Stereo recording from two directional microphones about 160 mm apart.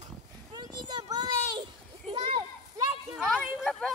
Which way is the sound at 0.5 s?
25° right (ahead or behind).